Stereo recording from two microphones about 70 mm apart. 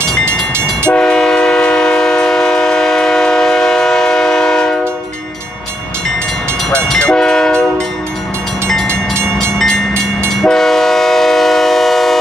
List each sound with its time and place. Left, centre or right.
0.7 s train: centre
6.7 s train: centre
10.3 s train: centre